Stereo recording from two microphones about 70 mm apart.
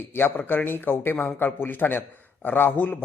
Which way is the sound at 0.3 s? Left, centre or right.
Left.